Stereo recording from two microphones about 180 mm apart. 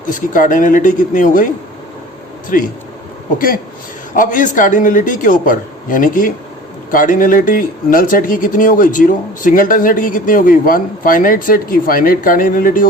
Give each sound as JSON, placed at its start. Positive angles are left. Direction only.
{"t": 0.0, "sound": "speech", "side_deg": 45}
{"t": 2.5, "sound": "speech", "side_deg": 50}